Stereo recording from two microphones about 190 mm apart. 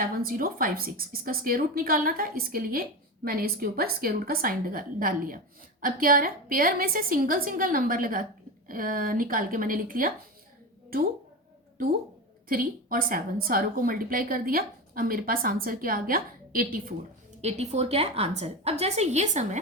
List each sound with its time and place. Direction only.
0.2 s a woman's voice: 50° right (ahead or behind)
12.5 s a woman's voice: 50° right (ahead or behind)
17.4 s a woman's voice: 35° right (ahead or behind)